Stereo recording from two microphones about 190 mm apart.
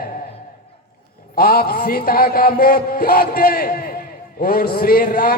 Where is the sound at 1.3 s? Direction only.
50° left (ahead or behind).